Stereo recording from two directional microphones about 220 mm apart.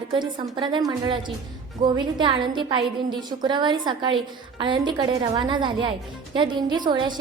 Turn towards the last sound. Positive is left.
turn(degrees=-20)  # may be behind; listen again after turning